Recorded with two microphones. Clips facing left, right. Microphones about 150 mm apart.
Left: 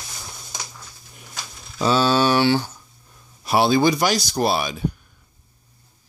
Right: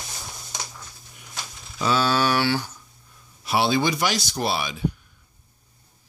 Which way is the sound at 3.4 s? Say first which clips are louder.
Left 5 dB; 45° left (ahead or behind).